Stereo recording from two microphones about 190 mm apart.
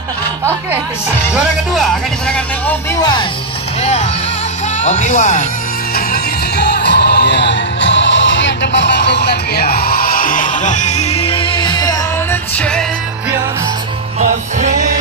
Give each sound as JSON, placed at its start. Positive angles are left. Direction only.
{"t": 1.3, "sound": "speech", "side_deg": 0}
{"t": 3.0, "sound": "speech", "side_deg": 20}
{"t": 3.8, "sound": "speech", "side_deg": 35}
{"t": 5.9, "sound": "music", "side_deg": 55}
{"t": 12.5, "sound": "speech", "side_deg": 5}
{"t": 14.2, "sound": "music", "side_deg": -40}